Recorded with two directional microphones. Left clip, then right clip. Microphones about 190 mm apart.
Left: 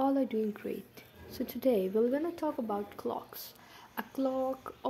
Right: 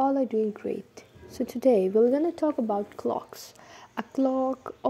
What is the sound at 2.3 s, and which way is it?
Speech, 25° right (ahead or behind).